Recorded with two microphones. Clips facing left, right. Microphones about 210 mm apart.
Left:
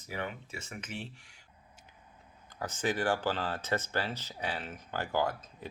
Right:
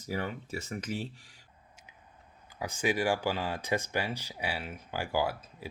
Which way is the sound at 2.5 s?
10° right (ahead or behind).